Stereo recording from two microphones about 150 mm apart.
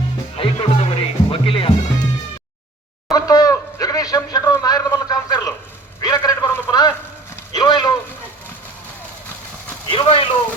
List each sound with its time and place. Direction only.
0.3 s music: 40° left (ahead or behind)
3.1 s a sound: 25° left (ahead or behind)
7.5 s speech: 30° left (ahead or behind)
9.9 s speech: 35° left (ahead or behind)